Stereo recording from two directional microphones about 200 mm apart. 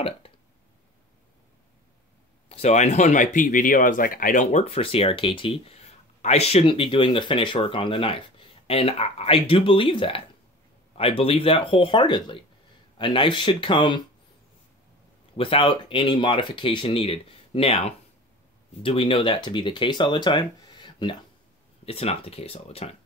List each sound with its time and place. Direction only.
0.2 s a sound: 25° left (ahead or behind)
2.5 s speech: 35° left (ahead or behind)
15.3 s speech: 25° left (ahead or behind)